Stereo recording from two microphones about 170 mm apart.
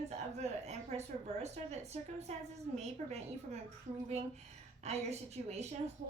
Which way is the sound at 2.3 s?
40° right (ahead or behind).